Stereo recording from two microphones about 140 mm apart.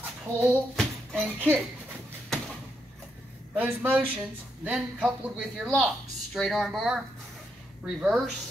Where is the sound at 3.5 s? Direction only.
10° right (ahead or behind).